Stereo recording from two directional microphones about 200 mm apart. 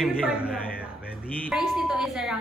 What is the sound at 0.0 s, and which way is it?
Speech, 5° right (ahead or behind).